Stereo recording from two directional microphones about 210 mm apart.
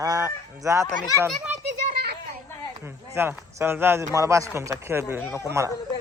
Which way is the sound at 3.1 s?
10° right (ahead or behind).